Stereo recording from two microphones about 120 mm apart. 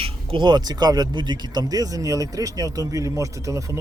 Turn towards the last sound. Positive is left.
turn(degrees=-25)  # may be behind; listen again after turning